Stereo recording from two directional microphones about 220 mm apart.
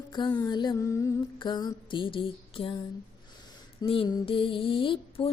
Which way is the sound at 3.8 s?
20° left (ahead or behind).